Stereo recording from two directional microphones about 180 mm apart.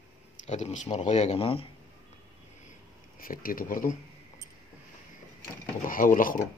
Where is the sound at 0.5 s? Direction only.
40° left (ahead or behind).